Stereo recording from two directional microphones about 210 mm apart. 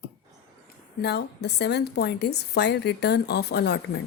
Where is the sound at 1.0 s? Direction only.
55° left (ahead or behind).